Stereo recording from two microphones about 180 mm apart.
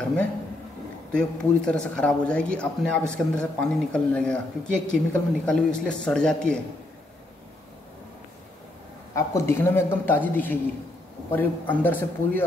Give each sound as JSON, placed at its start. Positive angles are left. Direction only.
{"t": 1.1, "sound": "speech", "side_deg": 5}
{"t": 9.1, "sound": "a man's voice", "side_deg": 15}